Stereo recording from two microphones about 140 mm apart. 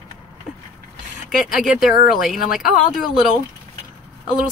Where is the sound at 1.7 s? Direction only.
5° right (ahead or behind).